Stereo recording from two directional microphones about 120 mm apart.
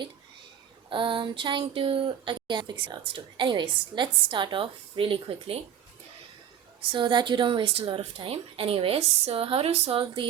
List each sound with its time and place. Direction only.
0.9 s speech: 45° right (ahead or behind)
6.9 s speech: 40° right (ahead or behind)